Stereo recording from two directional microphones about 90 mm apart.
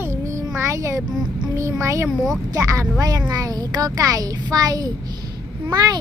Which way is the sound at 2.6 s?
35° right (ahead or behind).